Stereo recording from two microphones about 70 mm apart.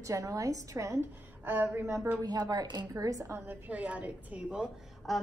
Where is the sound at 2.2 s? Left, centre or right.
Right.